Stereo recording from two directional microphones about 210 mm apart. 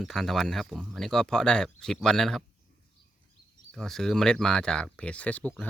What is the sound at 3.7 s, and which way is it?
Speech, centre (ahead or behind).